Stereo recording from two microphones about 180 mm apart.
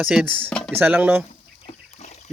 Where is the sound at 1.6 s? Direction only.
35° left (ahead or behind).